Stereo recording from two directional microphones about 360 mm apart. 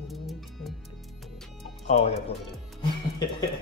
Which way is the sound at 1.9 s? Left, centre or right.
Centre.